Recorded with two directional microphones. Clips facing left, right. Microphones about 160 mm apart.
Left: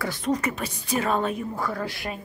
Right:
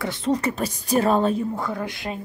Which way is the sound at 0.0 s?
25° right (ahead or behind).